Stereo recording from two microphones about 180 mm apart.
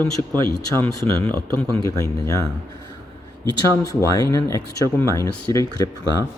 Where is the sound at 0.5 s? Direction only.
10° left (ahead or behind).